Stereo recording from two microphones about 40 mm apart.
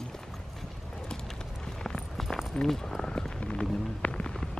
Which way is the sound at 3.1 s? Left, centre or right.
Left.